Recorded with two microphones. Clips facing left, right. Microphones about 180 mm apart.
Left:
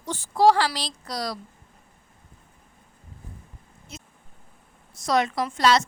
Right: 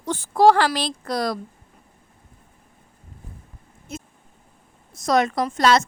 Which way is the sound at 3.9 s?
50° right (ahead or behind).